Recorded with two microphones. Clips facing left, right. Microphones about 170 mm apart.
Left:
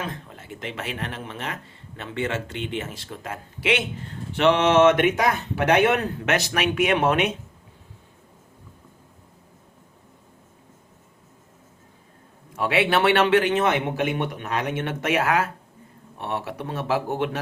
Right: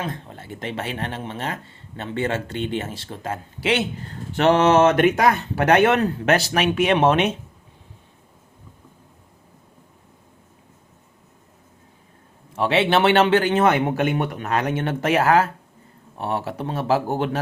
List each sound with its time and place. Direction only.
0.3 s speech: 35° right (ahead or behind)
12.5 s speech: 30° right (ahead or behind)
13.6 s speech: 40° right (ahead or behind)